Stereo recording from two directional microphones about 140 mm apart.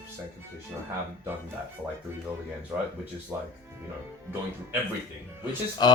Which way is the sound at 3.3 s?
20° right (ahead or behind).